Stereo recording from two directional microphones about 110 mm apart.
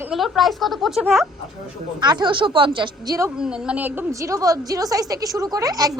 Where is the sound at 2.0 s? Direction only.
40° right (ahead or behind).